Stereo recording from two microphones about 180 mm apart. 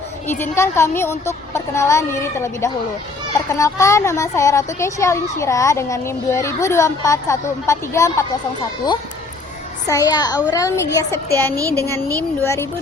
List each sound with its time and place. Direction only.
0.3 s speech: 15° left (ahead or behind)
9.8 s a child's voice: 20° left (ahead or behind)
11.5 s speech: 15° right (ahead or behind)
11.8 s speech: 15° left (ahead or behind)